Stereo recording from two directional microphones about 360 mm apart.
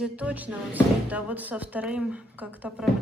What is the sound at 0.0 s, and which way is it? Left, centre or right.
Speech, centre.